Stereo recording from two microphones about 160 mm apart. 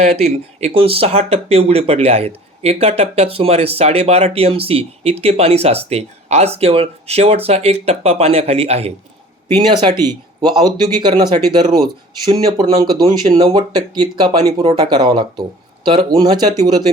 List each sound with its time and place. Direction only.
0.2 s speech: 40° right (ahead or behind)
9.6 s speech: 30° right (ahead or behind)